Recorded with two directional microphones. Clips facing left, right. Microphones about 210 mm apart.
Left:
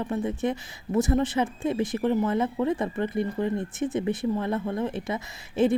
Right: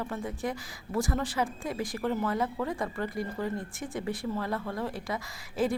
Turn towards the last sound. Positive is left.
turn(degrees=25)  # may be behind; listen again after turning